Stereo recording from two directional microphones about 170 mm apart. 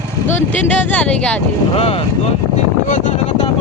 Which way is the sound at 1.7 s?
35° left (ahead or behind).